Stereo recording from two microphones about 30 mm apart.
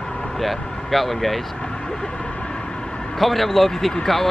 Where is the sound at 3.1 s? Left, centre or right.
Centre.